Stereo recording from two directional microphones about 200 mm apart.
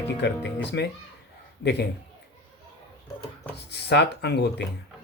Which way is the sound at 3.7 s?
55° left (ahead or behind).